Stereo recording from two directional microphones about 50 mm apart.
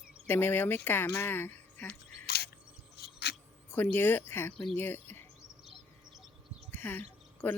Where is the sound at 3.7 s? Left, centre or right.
Left.